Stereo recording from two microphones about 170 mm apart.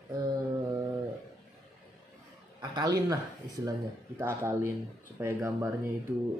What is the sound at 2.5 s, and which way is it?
Speech, 25° right (ahead or behind).